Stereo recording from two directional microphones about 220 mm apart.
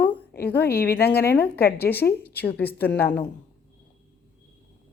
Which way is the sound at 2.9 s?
45° left (ahead or behind).